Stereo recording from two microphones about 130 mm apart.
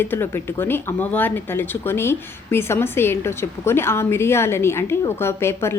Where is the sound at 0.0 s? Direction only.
15° left (ahead or behind).